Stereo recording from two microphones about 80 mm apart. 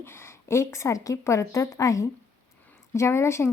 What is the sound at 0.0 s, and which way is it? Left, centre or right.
A woman's voice, left.